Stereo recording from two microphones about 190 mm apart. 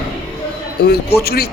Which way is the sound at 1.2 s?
55° left (ahead or behind).